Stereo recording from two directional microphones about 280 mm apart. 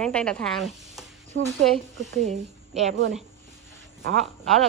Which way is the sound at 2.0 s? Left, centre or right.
Right.